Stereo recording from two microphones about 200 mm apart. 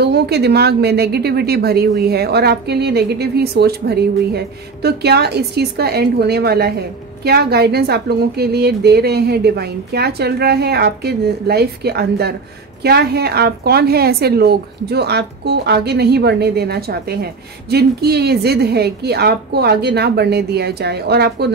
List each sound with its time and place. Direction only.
0.0 s a woman's voice: 55° right (ahead or behind)